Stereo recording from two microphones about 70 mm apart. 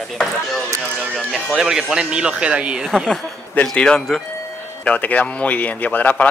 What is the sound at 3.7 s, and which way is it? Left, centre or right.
Speech, centre.